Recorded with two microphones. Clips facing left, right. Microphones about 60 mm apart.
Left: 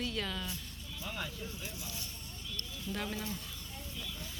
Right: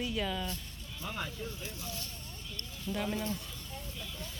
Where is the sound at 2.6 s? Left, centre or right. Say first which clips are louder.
Right 3 dB; centre.